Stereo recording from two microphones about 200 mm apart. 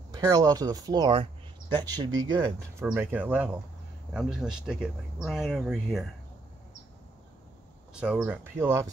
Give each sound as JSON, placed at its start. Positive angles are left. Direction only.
{"t": 0.1, "sound": "speech", "side_deg": -20}
{"t": 8.0, "sound": "speech", "side_deg": -5}